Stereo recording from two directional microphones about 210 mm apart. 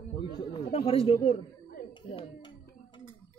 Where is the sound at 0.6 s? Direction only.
30° left (ahead or behind).